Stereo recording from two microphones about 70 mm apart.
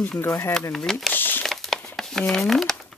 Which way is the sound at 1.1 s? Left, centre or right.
Left.